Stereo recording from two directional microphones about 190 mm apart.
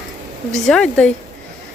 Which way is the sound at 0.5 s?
5° left (ahead or behind).